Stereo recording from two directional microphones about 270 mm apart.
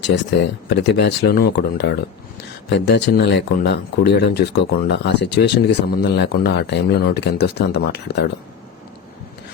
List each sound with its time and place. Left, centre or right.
0.0 s speech: left